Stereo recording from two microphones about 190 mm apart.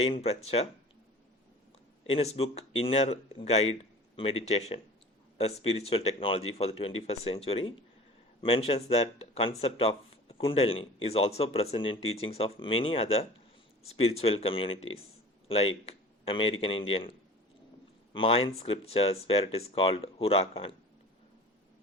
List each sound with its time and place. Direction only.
0.0 s speech: 30° left (ahead or behind)
2.0 s speech: 30° left (ahead or behind)